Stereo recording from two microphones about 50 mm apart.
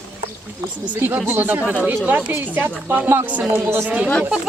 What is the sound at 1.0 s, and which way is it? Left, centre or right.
Speech, right.